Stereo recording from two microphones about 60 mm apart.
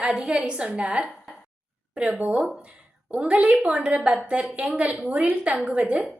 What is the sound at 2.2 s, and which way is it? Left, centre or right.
A woman's voice, right.